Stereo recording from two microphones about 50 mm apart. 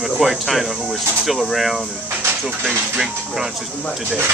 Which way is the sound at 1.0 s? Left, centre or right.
Right.